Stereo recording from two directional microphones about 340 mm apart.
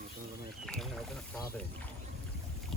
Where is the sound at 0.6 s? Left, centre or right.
Centre.